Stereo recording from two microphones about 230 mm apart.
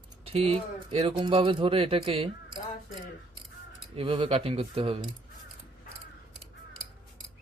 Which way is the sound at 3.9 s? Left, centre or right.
Right.